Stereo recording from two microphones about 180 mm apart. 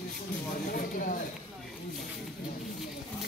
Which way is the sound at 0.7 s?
50° left (ahead or behind).